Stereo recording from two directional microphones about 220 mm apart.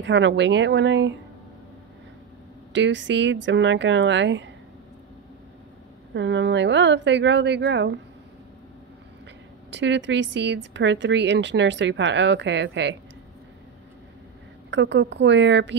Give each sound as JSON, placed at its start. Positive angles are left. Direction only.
{"t": 0.0, "sound": "speech", "side_deg": -55}
{"t": 2.7, "sound": "speech", "side_deg": -55}
{"t": 6.1, "sound": "a woman's voice", "side_deg": -55}
{"t": 9.7, "sound": "a woman's voice", "side_deg": -55}
{"t": 14.7, "sound": "a woman's voice", "side_deg": -55}